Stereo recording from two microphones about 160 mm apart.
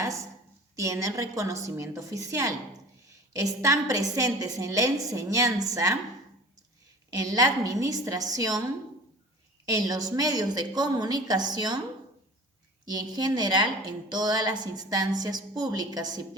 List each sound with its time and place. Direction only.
0.0 s a woman's voice: 20° right (ahead or behind)
7.1 s a woman's voice: 20° right (ahead or behind)
9.6 s a woman's voice: 20° right (ahead or behind)
12.8 s a woman's voice: 25° right (ahead or behind)